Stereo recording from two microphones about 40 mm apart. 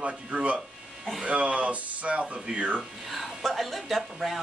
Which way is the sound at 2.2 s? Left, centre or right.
Centre.